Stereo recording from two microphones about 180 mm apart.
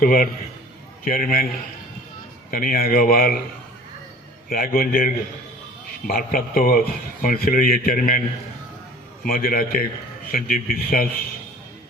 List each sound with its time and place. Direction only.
0.0 s a man's voice: 50° left (ahead or behind)
2.5 s a man's voice: 55° left (ahead or behind)
4.4 s a man's voice: 55° left (ahead or behind)
9.2 s a man's voice: 55° left (ahead or behind)